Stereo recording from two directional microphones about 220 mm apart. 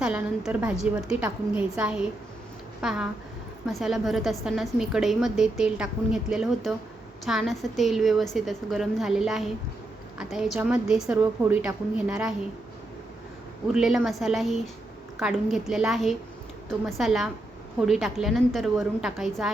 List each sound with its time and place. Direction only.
0.0 s a woman's voice: 5° right (ahead or behind)
13.7 s a woman's voice: centre (ahead or behind)